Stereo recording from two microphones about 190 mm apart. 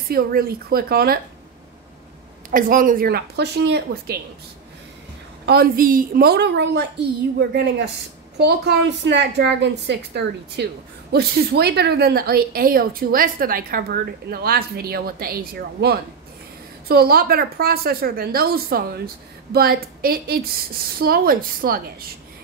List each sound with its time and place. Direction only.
0.1 s a woman's voice: 50° right (ahead or behind)
2.5 s a woman's voice: 45° right (ahead or behind); by 4.2 s 65° right (ahead or behind)
5.5 s a woman's voice: 50° right (ahead or behind)